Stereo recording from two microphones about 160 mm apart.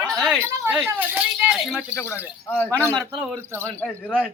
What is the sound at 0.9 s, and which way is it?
Speech, 10° right (ahead or behind).